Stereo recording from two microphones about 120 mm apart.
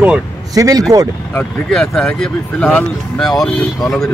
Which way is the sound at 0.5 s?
30° right (ahead or behind).